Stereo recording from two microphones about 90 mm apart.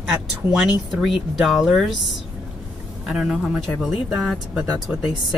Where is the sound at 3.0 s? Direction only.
5° right (ahead or behind).